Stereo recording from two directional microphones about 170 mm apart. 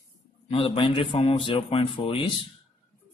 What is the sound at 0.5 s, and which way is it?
A man's voice, 35° left (ahead or behind).